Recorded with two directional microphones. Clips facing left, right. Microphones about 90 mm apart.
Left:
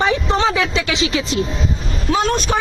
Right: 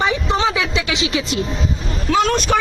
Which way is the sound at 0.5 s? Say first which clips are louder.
Left 2 dB; 20° right (ahead or behind).